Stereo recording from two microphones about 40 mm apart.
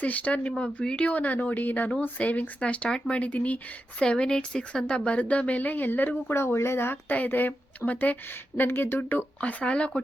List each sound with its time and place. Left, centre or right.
0.0 s a woman's voice: left
4.0 s a woman's voice: left
7.3 s speech: left
7.9 s a woman's voice: left
9.4 s speech: left